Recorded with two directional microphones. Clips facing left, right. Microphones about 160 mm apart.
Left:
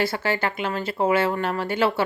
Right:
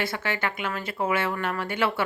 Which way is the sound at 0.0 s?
30° left (ahead or behind).